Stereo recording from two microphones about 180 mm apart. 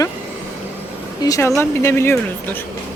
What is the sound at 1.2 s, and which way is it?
Speech, 20° left (ahead or behind).